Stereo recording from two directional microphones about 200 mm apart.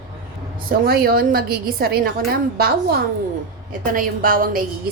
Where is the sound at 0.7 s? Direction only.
50° right (ahead or behind).